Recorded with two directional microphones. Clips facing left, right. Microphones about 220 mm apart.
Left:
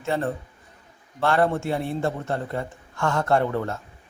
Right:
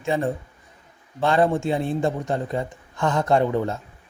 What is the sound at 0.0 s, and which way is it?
A man's voice, 15° right (ahead or behind).